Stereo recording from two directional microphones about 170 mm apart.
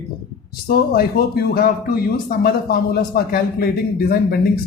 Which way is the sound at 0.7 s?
65° left (ahead or behind).